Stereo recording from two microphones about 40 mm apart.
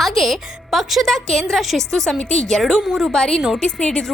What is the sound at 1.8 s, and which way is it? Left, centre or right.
A woman's voice, centre.